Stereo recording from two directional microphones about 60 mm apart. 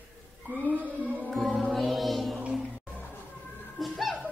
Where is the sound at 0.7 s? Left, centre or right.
Right.